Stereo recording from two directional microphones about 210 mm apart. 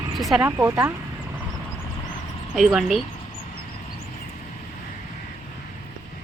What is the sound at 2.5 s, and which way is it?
Speech, centre (ahead or behind).